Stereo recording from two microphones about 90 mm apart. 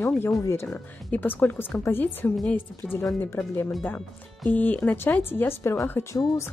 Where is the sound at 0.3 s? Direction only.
30° left (ahead or behind).